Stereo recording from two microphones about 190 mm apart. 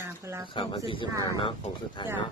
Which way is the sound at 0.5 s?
25° left (ahead or behind).